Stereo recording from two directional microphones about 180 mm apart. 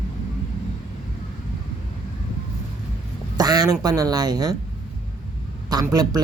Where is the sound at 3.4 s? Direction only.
20° right (ahead or behind).